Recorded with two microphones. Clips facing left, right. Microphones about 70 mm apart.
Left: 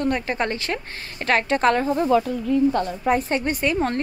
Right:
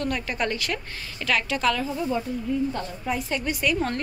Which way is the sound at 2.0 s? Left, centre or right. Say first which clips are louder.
Left 7 dB; left.